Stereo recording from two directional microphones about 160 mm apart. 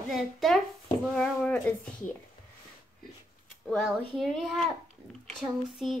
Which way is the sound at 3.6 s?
Centre (ahead or behind).